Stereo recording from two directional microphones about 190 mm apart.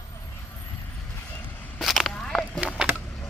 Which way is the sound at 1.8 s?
Centre (ahead or behind).